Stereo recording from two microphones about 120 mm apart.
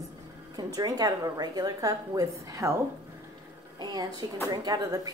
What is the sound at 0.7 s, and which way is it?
A woman's voice, 30° right (ahead or behind).